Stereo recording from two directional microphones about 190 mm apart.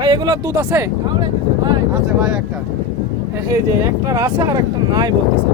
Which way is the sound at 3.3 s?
15° right (ahead or behind).